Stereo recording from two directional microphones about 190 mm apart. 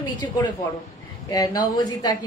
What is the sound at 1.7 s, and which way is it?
Speech, 20° left (ahead or behind).